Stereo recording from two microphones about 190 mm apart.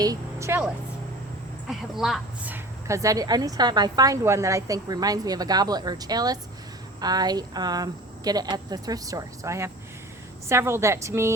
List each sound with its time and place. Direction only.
0.0 s a woman's voice: 15° right (ahead or behind)
1.6 s a woman's voice: centre (ahead or behind)